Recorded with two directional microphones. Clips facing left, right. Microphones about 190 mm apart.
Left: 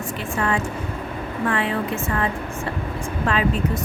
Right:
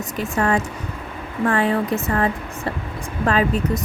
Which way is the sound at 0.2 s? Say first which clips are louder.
Right 4 dB; 40° right (ahead or behind).